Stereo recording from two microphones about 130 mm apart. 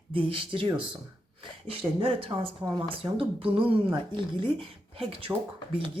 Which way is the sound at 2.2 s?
45° right (ahead or behind).